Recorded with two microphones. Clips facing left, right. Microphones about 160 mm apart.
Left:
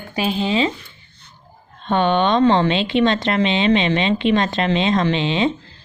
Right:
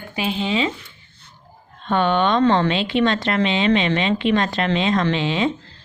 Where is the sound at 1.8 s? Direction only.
20° left (ahead or behind).